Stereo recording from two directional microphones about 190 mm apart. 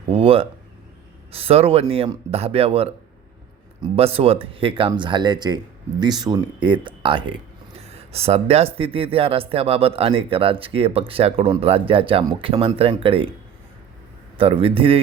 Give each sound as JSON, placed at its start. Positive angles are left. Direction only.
{"t": 0.1, "sound": "speech", "side_deg": -30}
{"t": 14.3, "sound": "speech", "side_deg": -30}